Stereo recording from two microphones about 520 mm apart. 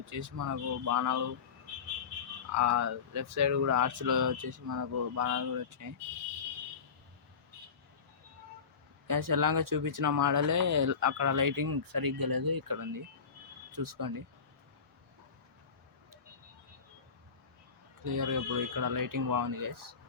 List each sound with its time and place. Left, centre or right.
0.0 s speech: right
2.5 s speech: right
9.0 s speech: right
18.0 s speech: right